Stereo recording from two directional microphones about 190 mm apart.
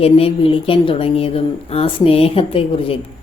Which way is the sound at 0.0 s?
30° left (ahead or behind).